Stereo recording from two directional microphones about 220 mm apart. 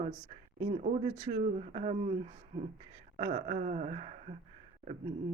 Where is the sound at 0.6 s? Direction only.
30° right (ahead or behind).